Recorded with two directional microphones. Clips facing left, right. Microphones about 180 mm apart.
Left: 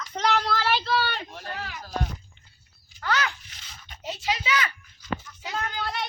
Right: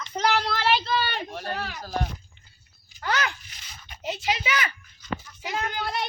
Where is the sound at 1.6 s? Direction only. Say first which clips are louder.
Right 3 dB; 40° right (ahead or behind).